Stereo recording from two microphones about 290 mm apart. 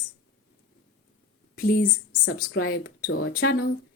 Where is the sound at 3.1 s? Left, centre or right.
Left.